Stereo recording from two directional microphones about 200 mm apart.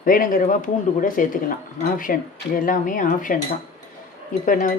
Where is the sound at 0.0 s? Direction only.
45° left (ahead or behind).